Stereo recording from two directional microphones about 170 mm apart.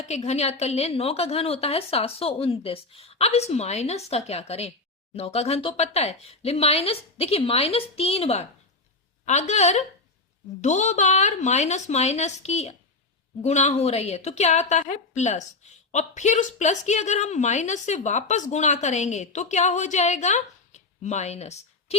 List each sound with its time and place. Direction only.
0.0 s a woman's voice: 40° left (ahead or behind)